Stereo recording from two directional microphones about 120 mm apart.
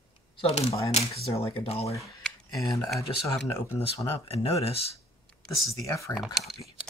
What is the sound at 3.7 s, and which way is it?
Speech, 55° left (ahead or behind).